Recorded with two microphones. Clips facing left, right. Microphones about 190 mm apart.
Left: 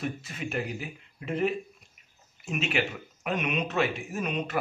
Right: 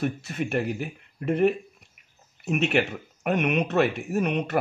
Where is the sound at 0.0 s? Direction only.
60° right (ahead or behind).